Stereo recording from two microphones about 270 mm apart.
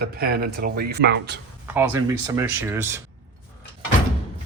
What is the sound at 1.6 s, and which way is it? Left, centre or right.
Speech, centre.